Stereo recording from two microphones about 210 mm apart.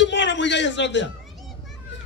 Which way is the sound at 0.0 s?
60° left (ahead or behind).